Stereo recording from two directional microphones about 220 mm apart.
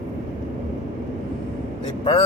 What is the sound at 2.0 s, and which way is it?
Speech, 25° left (ahead or behind).